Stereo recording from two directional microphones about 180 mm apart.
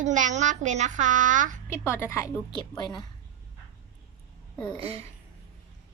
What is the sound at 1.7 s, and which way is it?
A woman's voice, 15° left (ahead or behind).